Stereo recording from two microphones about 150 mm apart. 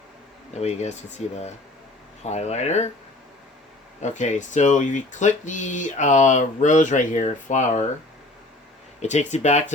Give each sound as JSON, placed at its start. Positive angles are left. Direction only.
{"t": 0.5, "sound": "speech", "side_deg": 45}
{"t": 4.0, "sound": "speech", "side_deg": 55}
{"t": 9.0, "sound": "speech", "side_deg": 50}